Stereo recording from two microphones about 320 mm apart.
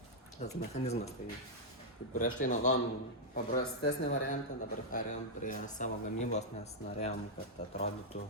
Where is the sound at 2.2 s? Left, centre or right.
Left.